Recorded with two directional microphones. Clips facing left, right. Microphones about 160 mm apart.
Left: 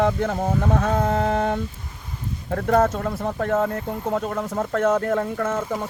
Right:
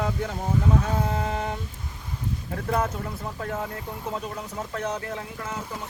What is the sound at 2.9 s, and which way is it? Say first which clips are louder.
Speech: left 8 dB; 75° left (ahead or behind).